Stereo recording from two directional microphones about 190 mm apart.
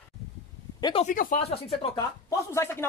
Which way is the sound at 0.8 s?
20° left (ahead or behind).